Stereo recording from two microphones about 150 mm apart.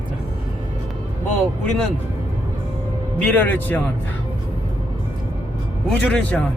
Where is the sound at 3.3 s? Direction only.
10° left (ahead or behind).